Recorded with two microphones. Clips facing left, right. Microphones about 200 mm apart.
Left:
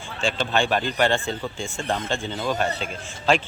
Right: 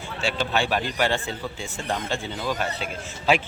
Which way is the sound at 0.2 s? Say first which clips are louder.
Left 2 dB; 5° right (ahead or behind).